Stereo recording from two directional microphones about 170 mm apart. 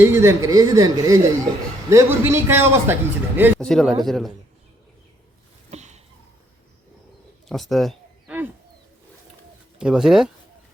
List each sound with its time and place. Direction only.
0.0 s a man's voice: 15° right (ahead or behind)
3.6 s speech: 5° left (ahead or behind)
5.7 s a sound: 40° right (ahead or behind)
7.4 s speech: centre (ahead or behind)
8.3 s a sound: 5° right (ahead or behind)
9.7 s speech: 5° right (ahead or behind)